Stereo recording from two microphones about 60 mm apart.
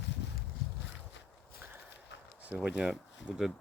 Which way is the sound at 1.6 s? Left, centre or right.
Right.